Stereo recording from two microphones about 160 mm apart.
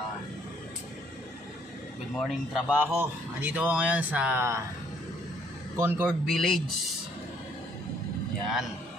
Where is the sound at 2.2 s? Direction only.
5° right (ahead or behind).